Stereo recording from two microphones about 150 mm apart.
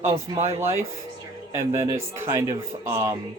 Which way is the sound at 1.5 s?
15° right (ahead or behind).